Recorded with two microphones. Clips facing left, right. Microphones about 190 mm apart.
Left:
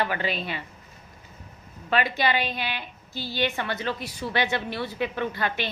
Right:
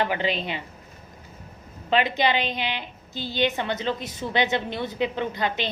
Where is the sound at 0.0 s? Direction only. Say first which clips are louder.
Right 2 dB; 20° right (ahead or behind).